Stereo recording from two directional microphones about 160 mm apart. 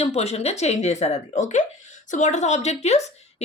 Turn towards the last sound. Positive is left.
turn(degrees=45)  # may be behind; listen again after turning